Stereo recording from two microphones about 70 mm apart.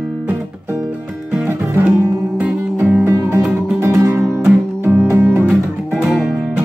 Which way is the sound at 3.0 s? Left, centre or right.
Right.